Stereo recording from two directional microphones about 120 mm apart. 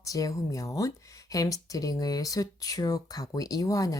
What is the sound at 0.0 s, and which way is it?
A woman's voice, 30° left (ahead or behind).